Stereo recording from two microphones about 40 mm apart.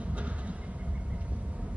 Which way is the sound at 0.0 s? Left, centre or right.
Right.